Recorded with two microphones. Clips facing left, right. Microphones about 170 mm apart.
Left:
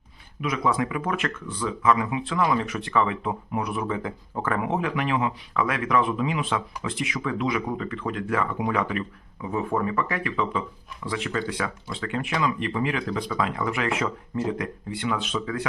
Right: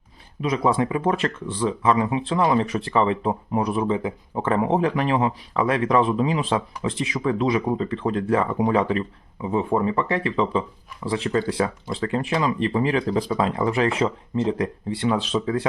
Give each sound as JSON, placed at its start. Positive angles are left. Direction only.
{"t": 0.4, "sound": "speech", "side_deg": -30}